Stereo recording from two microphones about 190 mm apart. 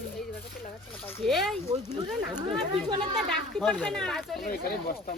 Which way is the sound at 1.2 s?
Centre (ahead or behind).